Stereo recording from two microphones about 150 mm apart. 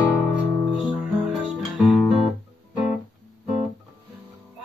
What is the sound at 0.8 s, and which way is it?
Music, centre (ahead or behind).